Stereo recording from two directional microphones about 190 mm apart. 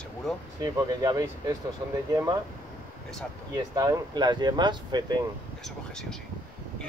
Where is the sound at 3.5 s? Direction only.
20° right (ahead or behind).